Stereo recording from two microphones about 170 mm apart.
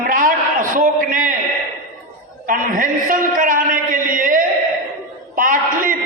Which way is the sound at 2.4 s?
50° right (ahead or behind).